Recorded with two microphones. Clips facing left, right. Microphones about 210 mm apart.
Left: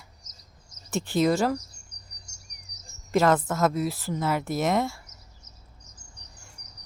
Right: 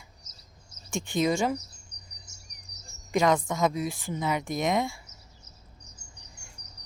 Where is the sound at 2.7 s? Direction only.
5° left (ahead or behind).